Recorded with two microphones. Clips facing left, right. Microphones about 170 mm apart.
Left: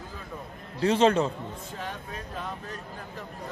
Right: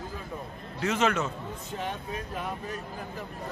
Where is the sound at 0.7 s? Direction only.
30° left (ahead or behind).